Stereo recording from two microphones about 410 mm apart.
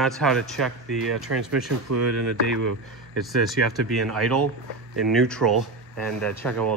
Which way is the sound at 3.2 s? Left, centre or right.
Centre.